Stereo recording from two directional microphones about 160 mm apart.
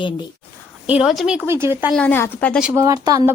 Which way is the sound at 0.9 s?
5° right (ahead or behind).